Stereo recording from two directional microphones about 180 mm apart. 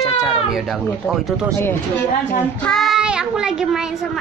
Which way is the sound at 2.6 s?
Centre (ahead or behind).